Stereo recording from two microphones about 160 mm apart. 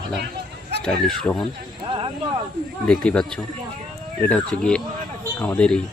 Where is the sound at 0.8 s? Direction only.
5° left (ahead or behind).